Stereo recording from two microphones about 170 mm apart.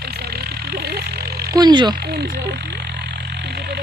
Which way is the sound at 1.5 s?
25° right (ahead or behind).